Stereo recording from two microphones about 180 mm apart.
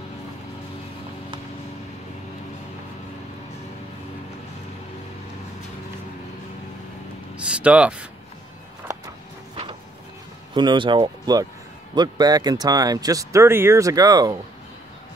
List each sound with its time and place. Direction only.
7.3 s speech: 5° right (ahead or behind)
10.5 s speech: 25° right (ahead or behind)